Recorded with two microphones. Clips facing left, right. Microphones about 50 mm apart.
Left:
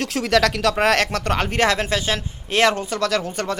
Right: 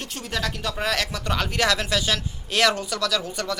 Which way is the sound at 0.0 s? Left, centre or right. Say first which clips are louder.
Left 11 dB; left.